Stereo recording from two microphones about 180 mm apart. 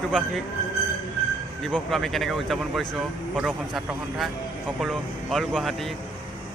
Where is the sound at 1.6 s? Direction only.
5° left (ahead or behind).